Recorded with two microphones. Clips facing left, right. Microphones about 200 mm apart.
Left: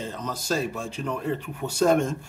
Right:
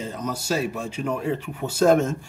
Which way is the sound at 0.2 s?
10° right (ahead or behind).